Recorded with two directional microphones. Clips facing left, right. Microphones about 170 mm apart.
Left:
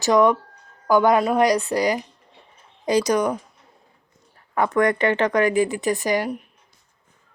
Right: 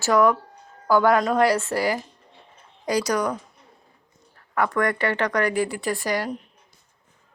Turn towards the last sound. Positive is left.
turn(degrees=15)  # may be behind; listen again after turning